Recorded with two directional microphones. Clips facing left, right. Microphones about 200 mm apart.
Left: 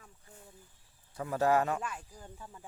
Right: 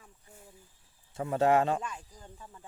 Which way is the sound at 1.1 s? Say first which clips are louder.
Right 3 dB; 25° right (ahead or behind).